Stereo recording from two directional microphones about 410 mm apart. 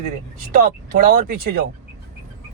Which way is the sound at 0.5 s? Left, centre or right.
Centre.